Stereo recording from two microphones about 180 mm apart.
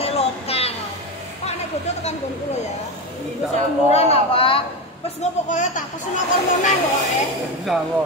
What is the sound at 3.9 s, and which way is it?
A woman's voice, 35° left (ahead or behind).